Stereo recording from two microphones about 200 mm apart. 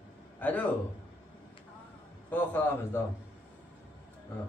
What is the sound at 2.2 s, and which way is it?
Speech, 10° left (ahead or behind).